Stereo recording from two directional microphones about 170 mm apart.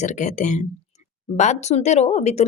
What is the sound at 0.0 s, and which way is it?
A woman's voice, 45° left (ahead or behind).